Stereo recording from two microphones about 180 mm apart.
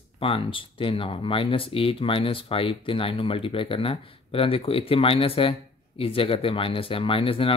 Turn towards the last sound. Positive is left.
turn(degrees=30)  # may be behind; listen again after turning